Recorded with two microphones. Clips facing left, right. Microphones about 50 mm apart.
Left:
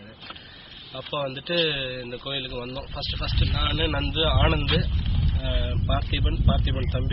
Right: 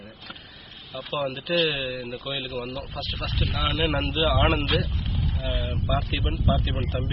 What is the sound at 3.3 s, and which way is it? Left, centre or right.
Speech, right.